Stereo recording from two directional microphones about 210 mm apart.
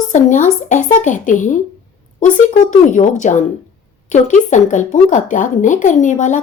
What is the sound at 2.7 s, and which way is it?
Speech, 35° left (ahead or behind).